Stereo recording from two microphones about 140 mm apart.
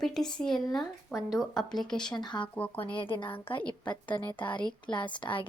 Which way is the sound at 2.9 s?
35° left (ahead or behind).